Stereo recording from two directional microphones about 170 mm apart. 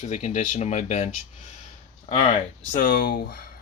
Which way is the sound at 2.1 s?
35° left (ahead or behind).